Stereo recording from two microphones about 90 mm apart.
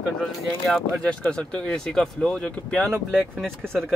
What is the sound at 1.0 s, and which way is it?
Speech, 10° left (ahead or behind).